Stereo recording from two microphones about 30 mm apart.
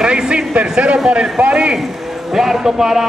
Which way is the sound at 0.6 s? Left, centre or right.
Right.